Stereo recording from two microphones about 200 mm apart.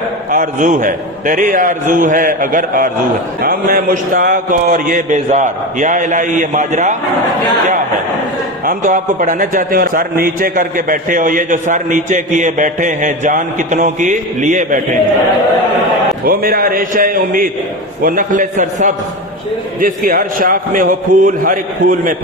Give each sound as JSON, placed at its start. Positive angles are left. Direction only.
{"t": 0.3, "sound": "a man's voice", "side_deg": -40}
{"t": 8.6, "sound": "a man's voice", "side_deg": -40}
{"t": 16.3, "sound": "a man's voice", "side_deg": -45}